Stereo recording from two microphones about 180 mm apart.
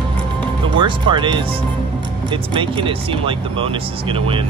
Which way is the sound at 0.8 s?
25° right (ahead or behind).